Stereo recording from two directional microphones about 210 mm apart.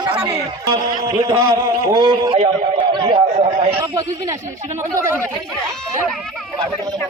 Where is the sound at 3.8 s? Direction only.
15° right (ahead or behind).